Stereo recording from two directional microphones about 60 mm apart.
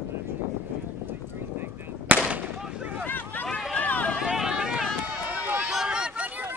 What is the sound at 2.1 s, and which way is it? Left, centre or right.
Gunshot, right.